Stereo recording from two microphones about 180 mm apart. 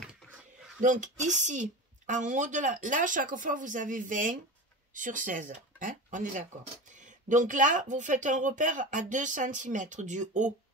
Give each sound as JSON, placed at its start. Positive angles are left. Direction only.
{"t": 0.7, "sound": "speech", "side_deg": -45}